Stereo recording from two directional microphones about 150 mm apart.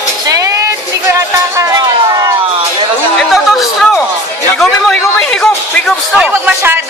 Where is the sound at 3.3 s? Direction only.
Centre (ahead or behind).